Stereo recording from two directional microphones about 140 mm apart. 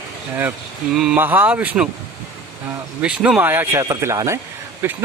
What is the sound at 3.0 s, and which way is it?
Speech, 10° right (ahead or behind).